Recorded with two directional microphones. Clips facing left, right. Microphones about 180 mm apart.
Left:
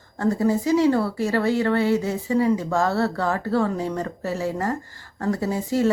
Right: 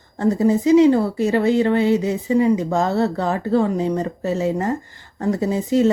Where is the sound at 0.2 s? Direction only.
20° right (ahead or behind).